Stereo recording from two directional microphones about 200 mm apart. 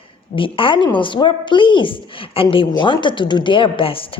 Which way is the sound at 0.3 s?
25° left (ahead or behind).